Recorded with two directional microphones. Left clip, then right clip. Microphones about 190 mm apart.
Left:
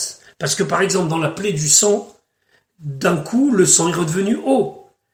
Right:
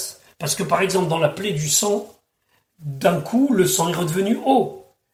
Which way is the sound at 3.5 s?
25° right (ahead or behind).